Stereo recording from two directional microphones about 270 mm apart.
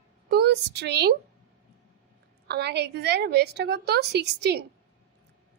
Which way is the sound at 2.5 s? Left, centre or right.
Right.